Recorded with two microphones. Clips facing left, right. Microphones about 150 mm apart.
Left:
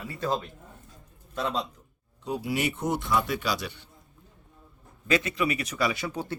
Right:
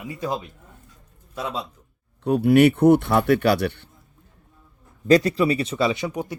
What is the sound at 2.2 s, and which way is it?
Speech, 60° right (ahead or behind).